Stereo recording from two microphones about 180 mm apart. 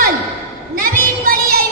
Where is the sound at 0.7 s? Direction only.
55° right (ahead or behind).